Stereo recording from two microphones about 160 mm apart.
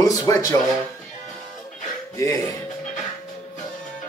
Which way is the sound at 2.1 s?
20° left (ahead or behind).